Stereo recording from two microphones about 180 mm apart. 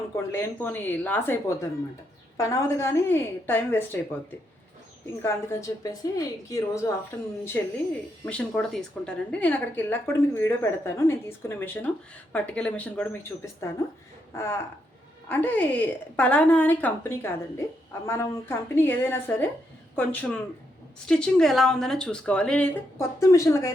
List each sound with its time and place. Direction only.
0.3 s a woman's voice: 10° left (ahead or behind)
5.2 s a woman's voice: 15° left (ahead or behind)